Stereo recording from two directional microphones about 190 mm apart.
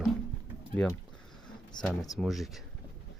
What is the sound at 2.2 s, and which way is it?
Speech, centre (ahead or behind).